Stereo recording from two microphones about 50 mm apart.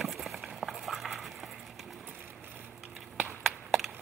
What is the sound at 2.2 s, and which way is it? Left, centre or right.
Boat, right.